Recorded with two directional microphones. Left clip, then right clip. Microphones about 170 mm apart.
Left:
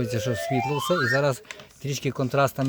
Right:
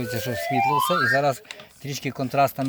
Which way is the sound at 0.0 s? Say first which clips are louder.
Even; 25° left (ahead or behind).